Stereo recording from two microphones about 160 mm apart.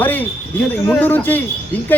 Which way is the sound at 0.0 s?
10° left (ahead or behind).